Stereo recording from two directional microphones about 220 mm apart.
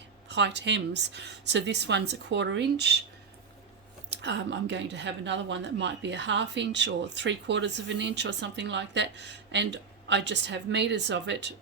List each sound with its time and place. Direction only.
0.3 s a woman's voice: 55° right (ahead or behind)
4.1 s a woman's voice: 50° right (ahead or behind)